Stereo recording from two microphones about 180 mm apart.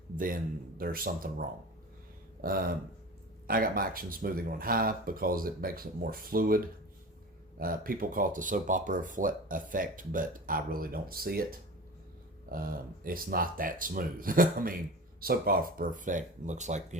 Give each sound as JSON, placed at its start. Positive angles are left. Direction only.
{"t": 0.2, "sound": "speech", "side_deg": -50}
{"t": 7.6, "sound": "speech", "side_deg": -50}
{"t": 12.5, "sound": "speech", "side_deg": -55}